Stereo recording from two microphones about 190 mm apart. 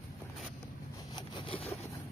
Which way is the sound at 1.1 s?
25° left (ahead or behind).